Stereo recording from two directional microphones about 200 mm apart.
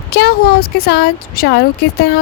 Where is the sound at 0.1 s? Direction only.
50° left (ahead or behind).